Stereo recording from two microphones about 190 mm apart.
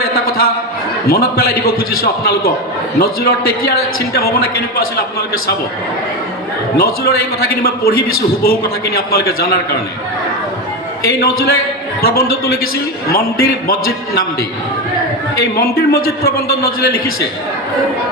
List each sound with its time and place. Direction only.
0.0 s a sound: 50° left (ahead or behind)
1.0 s a man's voice: 55° left (ahead or behind)
6.7 s a man's voice: 55° left (ahead or behind)
11.1 s a man's voice: 55° left (ahead or behind)
15.5 s a man's voice: 55° left (ahead or behind)